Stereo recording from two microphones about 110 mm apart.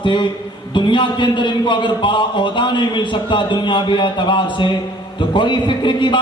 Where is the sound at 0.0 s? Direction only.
45° left (ahead or behind).